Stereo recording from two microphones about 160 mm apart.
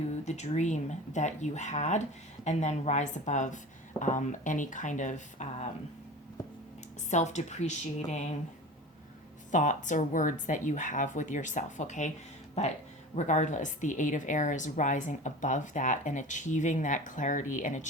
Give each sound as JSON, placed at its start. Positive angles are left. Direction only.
{"t": 0.3, "sound": "speech", "side_deg": 45}
{"t": 7.1, "sound": "speech", "side_deg": 45}
{"t": 9.5, "sound": "speech", "side_deg": 50}